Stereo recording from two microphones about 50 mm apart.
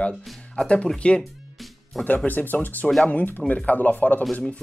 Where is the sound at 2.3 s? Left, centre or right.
Left.